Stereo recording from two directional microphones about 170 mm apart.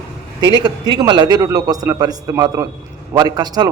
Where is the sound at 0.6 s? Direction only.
25° right (ahead or behind).